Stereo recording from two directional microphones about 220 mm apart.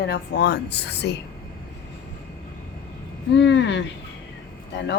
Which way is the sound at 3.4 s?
55° left (ahead or behind).